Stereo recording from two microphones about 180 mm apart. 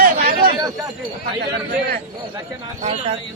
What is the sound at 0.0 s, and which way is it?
Chatter, 55° right (ahead or behind).